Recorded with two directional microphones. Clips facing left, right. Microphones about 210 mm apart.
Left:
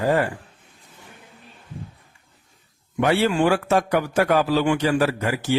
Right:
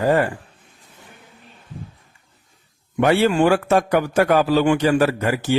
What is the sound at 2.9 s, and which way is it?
A man's voice, 50° right (ahead or behind).